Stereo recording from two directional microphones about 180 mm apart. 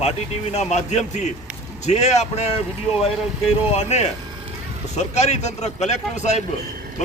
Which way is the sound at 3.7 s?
35° left (ahead or behind).